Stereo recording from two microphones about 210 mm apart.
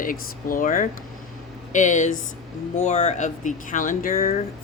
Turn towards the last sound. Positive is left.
turn(degrees=40)  # may be behind; listen again after turning